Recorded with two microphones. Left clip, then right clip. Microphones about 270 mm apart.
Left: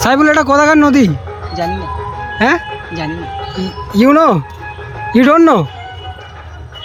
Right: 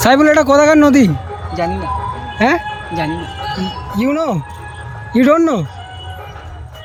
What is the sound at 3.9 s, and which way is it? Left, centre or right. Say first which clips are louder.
A man's voice: left 9 dB; centre.